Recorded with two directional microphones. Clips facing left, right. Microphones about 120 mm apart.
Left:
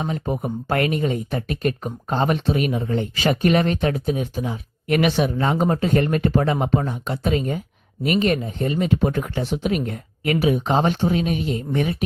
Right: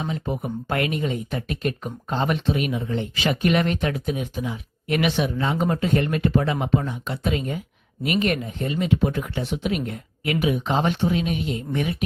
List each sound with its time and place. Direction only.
0.0 s speech: 45° left (ahead or behind)